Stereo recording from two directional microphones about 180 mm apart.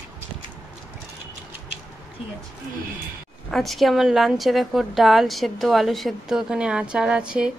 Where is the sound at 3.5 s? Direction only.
Centre (ahead or behind).